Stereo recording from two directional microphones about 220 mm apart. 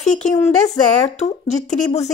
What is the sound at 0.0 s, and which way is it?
Speech, 30° left (ahead or behind).